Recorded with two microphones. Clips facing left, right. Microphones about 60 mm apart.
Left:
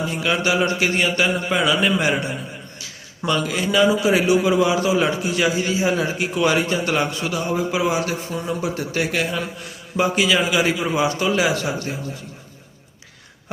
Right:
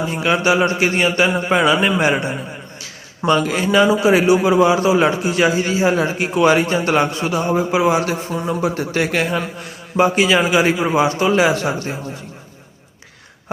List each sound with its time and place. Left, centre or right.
0.1 s a man's voice: right